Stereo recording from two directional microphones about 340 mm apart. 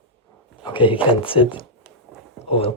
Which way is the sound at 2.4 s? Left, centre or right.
Centre.